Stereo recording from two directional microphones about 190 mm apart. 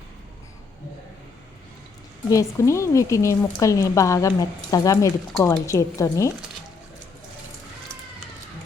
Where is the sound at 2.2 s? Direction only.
15° left (ahead or behind).